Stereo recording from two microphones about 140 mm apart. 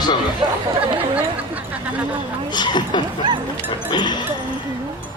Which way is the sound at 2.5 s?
30° left (ahead or behind).